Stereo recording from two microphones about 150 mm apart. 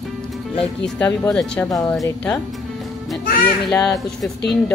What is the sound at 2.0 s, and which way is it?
Speech, 15° left (ahead or behind).